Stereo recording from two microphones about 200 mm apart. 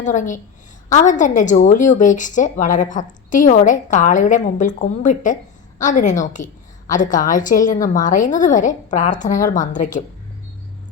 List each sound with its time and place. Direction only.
0.0 s a woman's voice: 40° left (ahead or behind)